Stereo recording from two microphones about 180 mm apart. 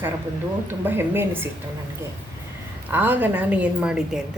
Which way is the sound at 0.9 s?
10° right (ahead or behind).